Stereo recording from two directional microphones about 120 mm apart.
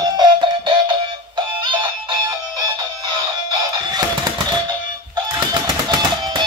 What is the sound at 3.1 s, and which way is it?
Music, 40° right (ahead or behind).